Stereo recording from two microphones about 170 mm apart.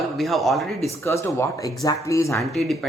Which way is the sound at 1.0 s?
15° left (ahead or behind).